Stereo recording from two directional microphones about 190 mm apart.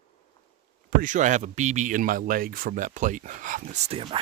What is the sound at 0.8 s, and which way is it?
Speech, 40° right (ahead or behind).